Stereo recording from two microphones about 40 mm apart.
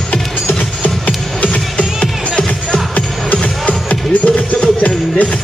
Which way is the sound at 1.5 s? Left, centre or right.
Left.